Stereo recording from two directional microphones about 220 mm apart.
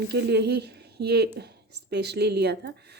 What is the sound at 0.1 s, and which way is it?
A woman's voice, 50° right (ahead or behind).